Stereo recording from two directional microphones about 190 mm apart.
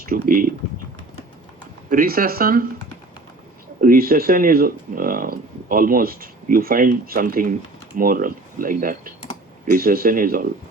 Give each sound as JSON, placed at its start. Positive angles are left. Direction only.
{"t": 0.0, "sound": "speech", "side_deg": -50}
{"t": 1.9, "sound": "speech", "side_deg": -50}
{"t": 3.8, "sound": "speech", "side_deg": -50}